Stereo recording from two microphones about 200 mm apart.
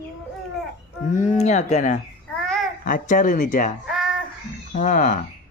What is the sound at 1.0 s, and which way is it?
Speech, 40° left (ahead or behind).